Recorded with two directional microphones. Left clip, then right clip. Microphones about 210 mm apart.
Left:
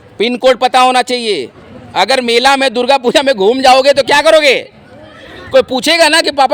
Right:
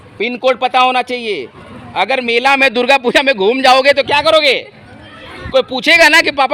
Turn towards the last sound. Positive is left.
turn(degrees=15)  # may be behind; listen again after turning